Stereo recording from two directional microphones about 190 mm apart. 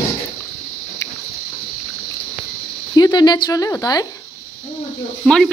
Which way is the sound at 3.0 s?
20° left (ahead or behind).